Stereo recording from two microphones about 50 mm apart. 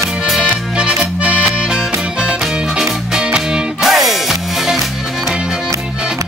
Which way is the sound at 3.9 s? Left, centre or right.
Centre.